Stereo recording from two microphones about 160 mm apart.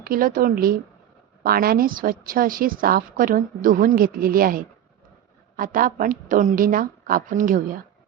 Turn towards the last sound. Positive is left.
turn(degrees=-55)  # may be behind; listen again after turning